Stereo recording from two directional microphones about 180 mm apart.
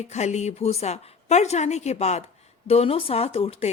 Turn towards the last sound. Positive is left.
turn(degrees=35)  # may be behind; listen again after turning